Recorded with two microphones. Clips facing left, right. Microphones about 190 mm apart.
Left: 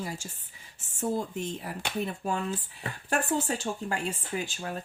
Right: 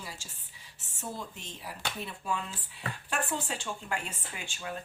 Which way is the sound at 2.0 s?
45° left (ahead or behind).